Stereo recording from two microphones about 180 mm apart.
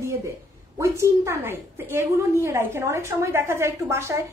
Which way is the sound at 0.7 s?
15° right (ahead or behind).